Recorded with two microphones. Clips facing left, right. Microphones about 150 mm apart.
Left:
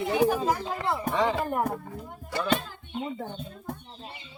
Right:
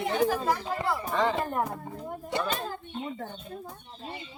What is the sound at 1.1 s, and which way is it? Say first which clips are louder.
Speech: left 1 dB; 5° left (ahead or behind).